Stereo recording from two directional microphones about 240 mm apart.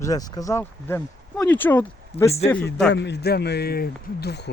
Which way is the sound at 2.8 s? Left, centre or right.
Left.